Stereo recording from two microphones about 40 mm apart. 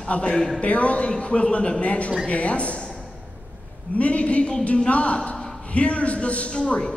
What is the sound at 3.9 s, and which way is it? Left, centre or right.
A man's voice, left.